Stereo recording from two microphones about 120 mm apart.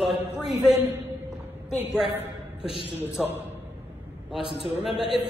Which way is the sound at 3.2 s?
5° right (ahead or behind).